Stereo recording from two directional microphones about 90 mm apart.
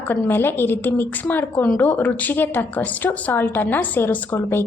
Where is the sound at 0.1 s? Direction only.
25° left (ahead or behind).